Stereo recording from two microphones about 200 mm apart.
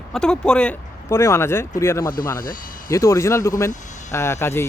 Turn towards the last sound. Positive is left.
turn(degrees=15)  # may be behind; listen again after turning